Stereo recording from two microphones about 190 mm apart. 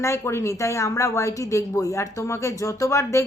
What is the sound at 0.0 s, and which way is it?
A woman's voice, 15° left (ahead or behind).